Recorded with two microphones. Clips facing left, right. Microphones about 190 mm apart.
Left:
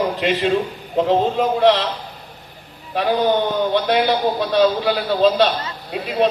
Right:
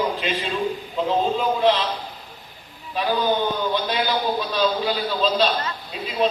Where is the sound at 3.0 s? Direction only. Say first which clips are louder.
Left 4 dB; 65° left (ahead or behind).